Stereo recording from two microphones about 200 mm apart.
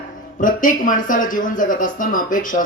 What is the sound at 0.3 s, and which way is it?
Speech, 40° left (ahead or behind).